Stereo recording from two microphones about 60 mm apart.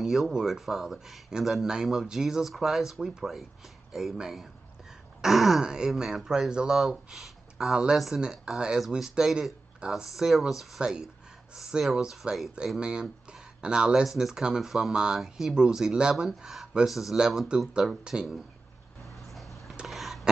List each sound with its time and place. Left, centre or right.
0.0 s speech: centre
7.7 s speech: centre
17.8 s speech: centre
19.2 s a sound: centre